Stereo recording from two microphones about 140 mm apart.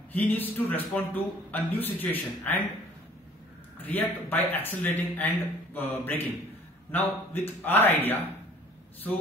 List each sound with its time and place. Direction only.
0.1 s speech: 10° left (ahead or behind)
3.8 s speech: 10° left (ahead or behind)